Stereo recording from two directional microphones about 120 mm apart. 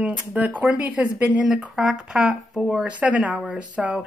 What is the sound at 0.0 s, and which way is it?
Speech, 10° right (ahead or behind).